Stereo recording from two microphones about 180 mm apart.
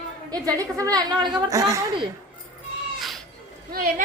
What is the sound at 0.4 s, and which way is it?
A woman's voice, 20° right (ahead or behind).